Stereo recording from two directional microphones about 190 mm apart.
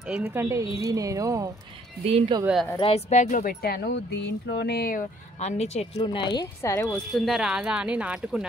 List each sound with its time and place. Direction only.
0.0 s speech: 10° right (ahead or behind)
2.0 s speech: 30° right (ahead or behind)
2.4 s speech: centre (ahead or behind)
2.8 s speech: 35° left (ahead or behind); by 5.0 s 55° left (ahead or behind)
5.4 s speech: 35° left (ahead or behind)
6.3 s a woman's voice: 20° left (ahead or behind)
7.2 s speech: centre (ahead or behind)